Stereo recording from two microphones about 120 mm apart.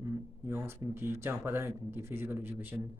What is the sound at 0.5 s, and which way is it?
Speech, 20° right (ahead or behind).